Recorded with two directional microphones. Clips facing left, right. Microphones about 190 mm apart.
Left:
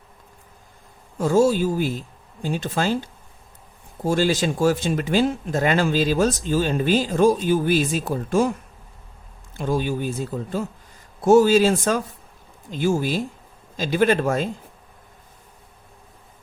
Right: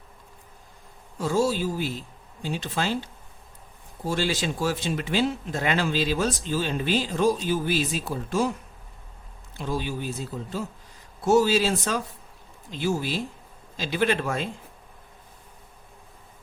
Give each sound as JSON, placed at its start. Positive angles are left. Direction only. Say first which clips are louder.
{"t": 1.2, "sound": "speech", "louder": "left 6 dB", "side_deg": 50}
{"t": 4.0, "sound": "speech", "louder": "left 6 dB", "side_deg": 45}
{"t": 9.6, "sound": "speech", "louder": "left 6 dB", "side_deg": 50}